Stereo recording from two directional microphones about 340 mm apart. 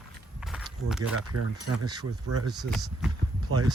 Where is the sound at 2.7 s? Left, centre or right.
Centre.